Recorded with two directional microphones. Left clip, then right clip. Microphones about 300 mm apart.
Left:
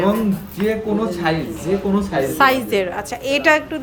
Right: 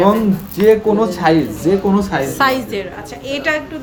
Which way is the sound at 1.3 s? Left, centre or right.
Centre.